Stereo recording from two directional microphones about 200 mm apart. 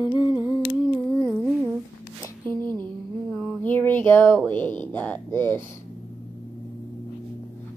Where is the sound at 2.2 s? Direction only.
10° left (ahead or behind).